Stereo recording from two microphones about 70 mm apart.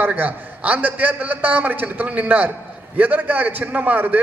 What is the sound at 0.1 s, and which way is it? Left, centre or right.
A man's voice, right.